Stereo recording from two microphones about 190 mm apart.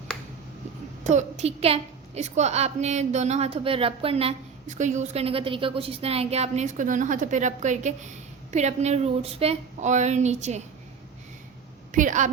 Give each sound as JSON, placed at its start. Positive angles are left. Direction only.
{"t": 1.0, "sound": "a woman's voice", "side_deg": -35}
{"t": 11.9, "sound": "a woman's voice", "side_deg": -45}